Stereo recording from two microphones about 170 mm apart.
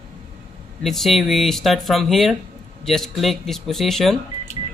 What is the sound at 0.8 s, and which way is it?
Speech, centre (ahead or behind).